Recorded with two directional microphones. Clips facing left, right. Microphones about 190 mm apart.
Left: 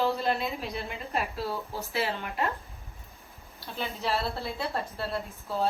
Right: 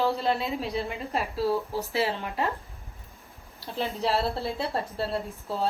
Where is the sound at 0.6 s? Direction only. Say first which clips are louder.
Right 5 dB; 30° right (ahead or behind).